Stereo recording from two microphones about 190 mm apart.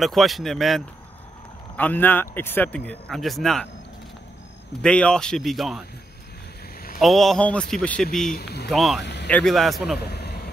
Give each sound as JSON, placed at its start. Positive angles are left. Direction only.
{"t": 0.0, "sound": "a man's voice", "side_deg": 0}
{"t": 4.8, "sound": "a man's voice", "side_deg": 5}
{"t": 7.0, "sound": "a man's voice", "side_deg": 0}
{"t": 8.4, "sound": "speech", "side_deg": 60}
{"t": 8.6, "sound": "speech", "side_deg": 0}
{"t": 9.0, "sound": "a sound", "side_deg": 65}
{"t": 9.3, "sound": "a man's voice", "side_deg": 0}
{"t": 9.9, "sound": "vehicle", "side_deg": 55}